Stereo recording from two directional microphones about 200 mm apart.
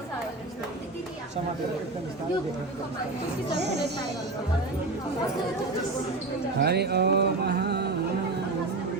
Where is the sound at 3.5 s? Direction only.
55° right (ahead or behind).